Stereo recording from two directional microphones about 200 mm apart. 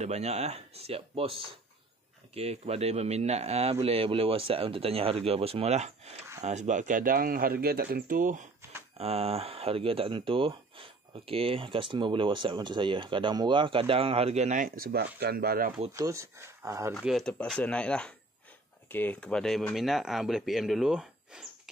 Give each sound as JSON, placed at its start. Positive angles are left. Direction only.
{"t": 0.0, "sound": "speech", "side_deg": -35}
{"t": 8.9, "sound": "speech", "side_deg": -30}
{"t": 15.9, "sound": "speech", "side_deg": -15}
{"t": 16.9, "sound": "speech", "side_deg": 0}